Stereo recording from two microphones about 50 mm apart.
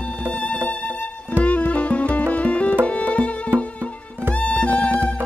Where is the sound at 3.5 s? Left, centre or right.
Right.